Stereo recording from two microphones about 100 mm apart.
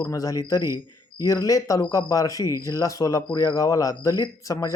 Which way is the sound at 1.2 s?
35° left (ahead or behind).